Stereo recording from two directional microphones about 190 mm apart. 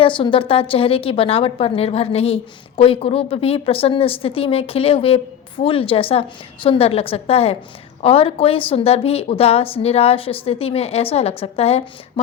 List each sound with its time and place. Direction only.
0.0 s a woman's voice: 25° left (ahead or behind)